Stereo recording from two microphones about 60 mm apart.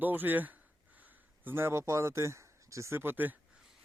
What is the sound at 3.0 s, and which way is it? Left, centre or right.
Speech, right.